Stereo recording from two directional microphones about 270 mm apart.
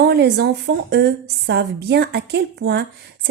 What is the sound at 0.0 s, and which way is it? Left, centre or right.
A woman's voice, right.